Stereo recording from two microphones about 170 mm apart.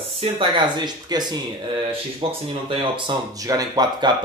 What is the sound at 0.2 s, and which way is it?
Speech, 30° right (ahead or behind).